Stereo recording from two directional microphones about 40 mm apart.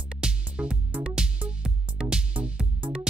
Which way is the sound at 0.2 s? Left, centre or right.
Right.